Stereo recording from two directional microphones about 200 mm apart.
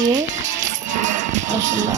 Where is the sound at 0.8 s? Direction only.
40° right (ahead or behind).